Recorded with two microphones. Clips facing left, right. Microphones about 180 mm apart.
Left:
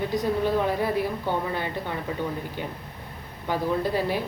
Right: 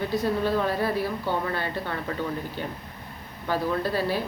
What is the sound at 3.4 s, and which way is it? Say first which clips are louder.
Speech: left 1 dB; 15° left (ahead or behind).